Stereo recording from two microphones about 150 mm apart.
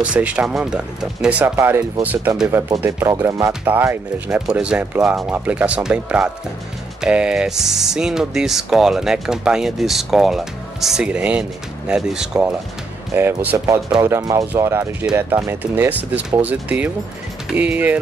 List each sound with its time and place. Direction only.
0.0 s speech: 10° right (ahead or behind)
13.1 s speech: 15° right (ahead or behind)